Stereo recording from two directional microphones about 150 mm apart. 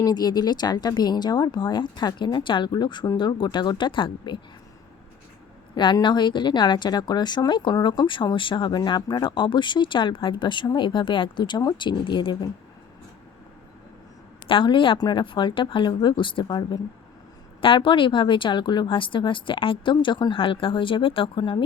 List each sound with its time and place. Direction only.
0.0 s a woman's voice: 25° left (ahead or behind)
5.7 s a woman's voice: 30° left (ahead or behind)
14.4 s a woman's voice: 35° left (ahead or behind)